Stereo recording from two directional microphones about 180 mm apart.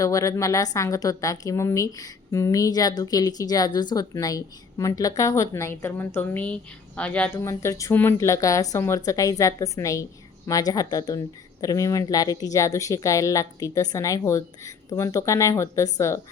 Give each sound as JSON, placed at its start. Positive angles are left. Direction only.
{"t": 0.0, "sound": "a woman's voice", "side_deg": 20}